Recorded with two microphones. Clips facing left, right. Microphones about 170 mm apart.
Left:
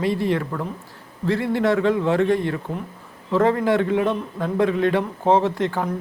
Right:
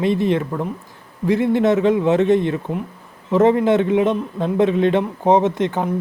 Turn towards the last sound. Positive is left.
turn(degrees=-20)  # may be behind; listen again after turning